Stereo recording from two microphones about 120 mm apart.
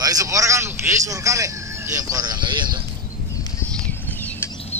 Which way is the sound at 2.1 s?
35° right (ahead or behind).